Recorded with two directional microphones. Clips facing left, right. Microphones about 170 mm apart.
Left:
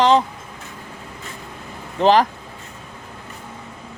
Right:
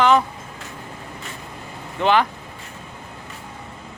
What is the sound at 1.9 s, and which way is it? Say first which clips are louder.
Speech: left 3 dB; 35° left (ahead or behind).